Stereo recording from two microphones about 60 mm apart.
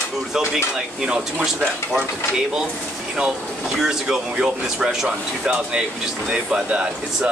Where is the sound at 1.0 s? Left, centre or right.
Centre.